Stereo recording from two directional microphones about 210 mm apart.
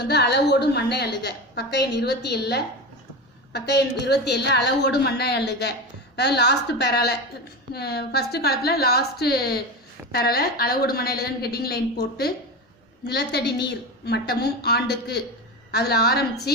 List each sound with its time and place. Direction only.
0.0 s a woman's voice: 55° left (ahead or behind)